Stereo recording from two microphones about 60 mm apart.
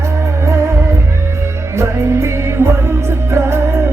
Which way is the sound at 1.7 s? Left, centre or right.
Right.